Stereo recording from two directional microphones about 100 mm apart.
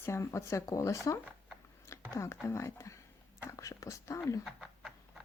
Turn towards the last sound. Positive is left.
turn(degrees=35)  # may be behind; listen again after turning